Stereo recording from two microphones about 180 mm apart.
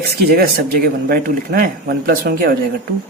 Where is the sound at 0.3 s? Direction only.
60° right (ahead or behind).